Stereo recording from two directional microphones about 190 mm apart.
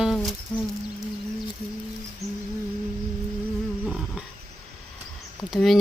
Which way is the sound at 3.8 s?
5° right (ahead or behind).